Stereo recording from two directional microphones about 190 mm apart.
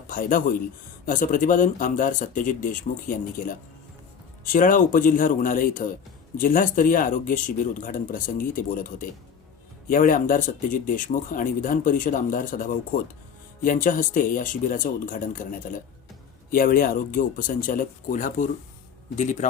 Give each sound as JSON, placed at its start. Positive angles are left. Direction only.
{"t": 0.1, "sound": "a man's voice", "side_deg": 45}